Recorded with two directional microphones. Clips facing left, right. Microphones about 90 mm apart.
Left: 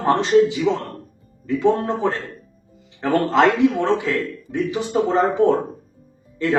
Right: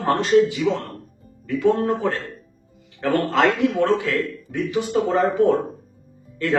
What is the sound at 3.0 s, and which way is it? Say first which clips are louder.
Speech: left 2 dB; 20° left (ahead or behind).